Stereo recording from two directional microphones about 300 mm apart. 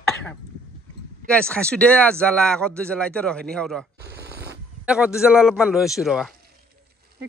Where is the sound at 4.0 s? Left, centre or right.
Right.